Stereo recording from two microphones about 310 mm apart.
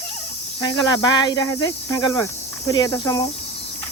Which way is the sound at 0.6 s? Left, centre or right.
Centre.